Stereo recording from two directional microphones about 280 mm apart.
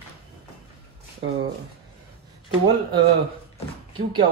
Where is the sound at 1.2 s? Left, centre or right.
Right.